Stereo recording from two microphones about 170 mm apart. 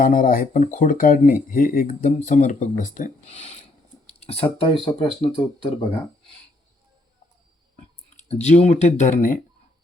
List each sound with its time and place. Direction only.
0.0 s speech: 55° left (ahead or behind); by 6.3 s 30° left (ahead or behind)
8.1 s speech: 40° left (ahead or behind)